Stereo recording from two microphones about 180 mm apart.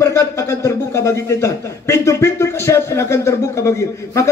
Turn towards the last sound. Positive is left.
turn(degrees=15)  # may be behind; listen again after turning